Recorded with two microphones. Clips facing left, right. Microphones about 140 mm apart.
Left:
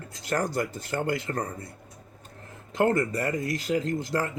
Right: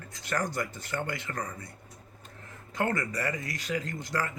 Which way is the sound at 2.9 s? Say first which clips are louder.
Left 6 dB; 25° left (ahead or behind).